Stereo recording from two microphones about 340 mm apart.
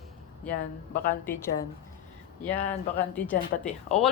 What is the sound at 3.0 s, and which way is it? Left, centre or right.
A woman's voice, centre.